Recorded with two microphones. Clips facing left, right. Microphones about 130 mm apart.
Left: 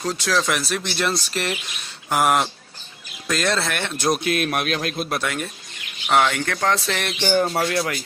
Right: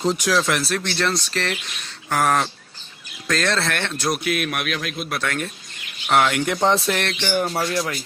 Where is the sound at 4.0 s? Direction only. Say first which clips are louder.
Left 3 dB; 25° left (ahead or behind).